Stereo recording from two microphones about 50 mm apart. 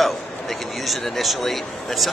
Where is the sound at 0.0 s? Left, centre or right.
Centre.